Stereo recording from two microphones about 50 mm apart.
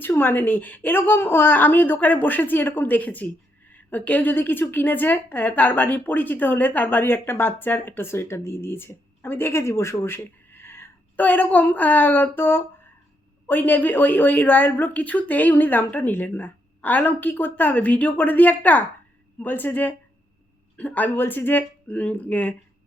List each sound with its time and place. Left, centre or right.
0.2 s a woman's voice: left
11.2 s a woman's voice: left
13.5 s a woman's voice: left